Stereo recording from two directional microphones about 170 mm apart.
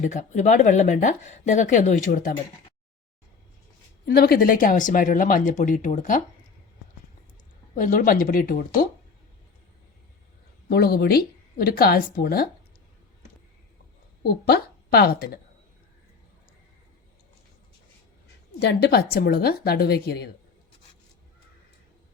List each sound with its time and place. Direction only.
0.0 s speech: 45° left (ahead or behind)
4.0 s speech: 65° left (ahead or behind); by 6.2 s 45° left (ahead or behind)
7.8 s speech: 50° left (ahead or behind)
10.7 s a woman's voice: 65° left (ahead or behind)
14.3 s a woman's voice: 70° left (ahead or behind)
18.6 s a woman's voice: 75° left (ahead or behind)